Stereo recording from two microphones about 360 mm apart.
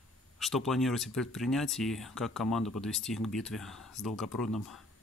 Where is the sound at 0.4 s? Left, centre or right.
Centre.